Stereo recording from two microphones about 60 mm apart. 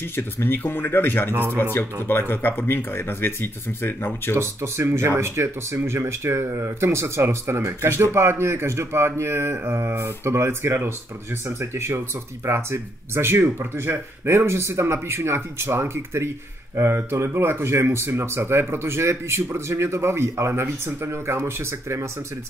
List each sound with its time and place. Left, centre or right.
0.1 s speech: left
1.3 s speech: right
1.6 s speech: left
4.4 s speech: right